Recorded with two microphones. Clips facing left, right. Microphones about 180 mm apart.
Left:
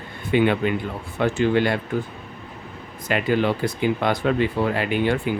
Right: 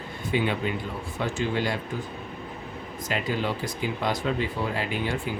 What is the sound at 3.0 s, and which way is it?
Speech, 65° left (ahead or behind).